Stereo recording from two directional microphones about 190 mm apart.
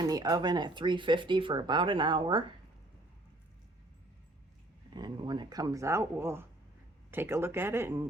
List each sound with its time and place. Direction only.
0.0 s speech: 20° right (ahead or behind)
4.9 s speech: 25° right (ahead or behind)